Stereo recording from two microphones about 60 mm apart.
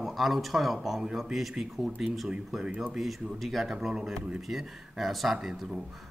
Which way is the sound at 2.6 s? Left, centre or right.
Centre.